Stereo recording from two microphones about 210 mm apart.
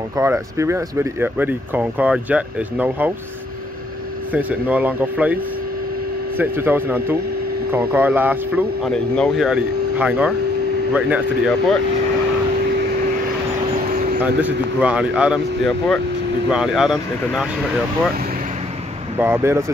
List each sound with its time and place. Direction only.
0.2 s speech: 10° right (ahead or behind)
4.3 s speech: 5° right (ahead or behind)
8.9 s speech: 5° left (ahead or behind)
13.9 s vehicle: 45° right (ahead or behind)
14.2 s speech: 5° right (ahead or behind)
19.1 s speech: 10° right (ahead or behind)